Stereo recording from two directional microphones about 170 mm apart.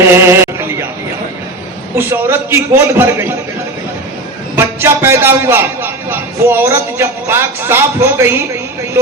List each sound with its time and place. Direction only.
0.0 s a man's voice: 15° right (ahead or behind)
2.0 s a man's voice: 15° right (ahead or behind)
4.5 s a man's voice: 15° right (ahead or behind)